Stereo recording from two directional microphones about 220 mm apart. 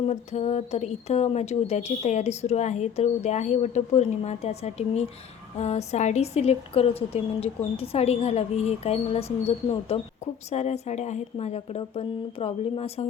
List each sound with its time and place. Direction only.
0.1 s speech: 30° left (ahead or behind)